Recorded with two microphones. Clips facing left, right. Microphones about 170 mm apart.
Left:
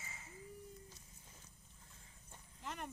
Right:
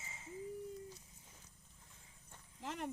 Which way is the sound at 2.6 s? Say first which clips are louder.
Right 3 dB; 90° right.